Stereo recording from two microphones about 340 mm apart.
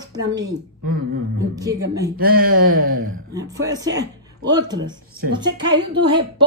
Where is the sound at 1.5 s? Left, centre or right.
Centre.